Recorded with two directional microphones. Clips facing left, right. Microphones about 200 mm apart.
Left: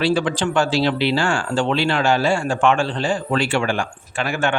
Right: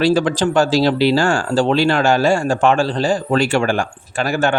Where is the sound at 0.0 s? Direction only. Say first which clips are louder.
Right 4 dB; 40° right (ahead or behind).